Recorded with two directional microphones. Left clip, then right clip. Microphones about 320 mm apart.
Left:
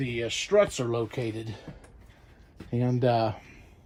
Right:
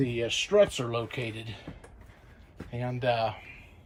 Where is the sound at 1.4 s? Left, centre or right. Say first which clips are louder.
Left 2 dB; centre.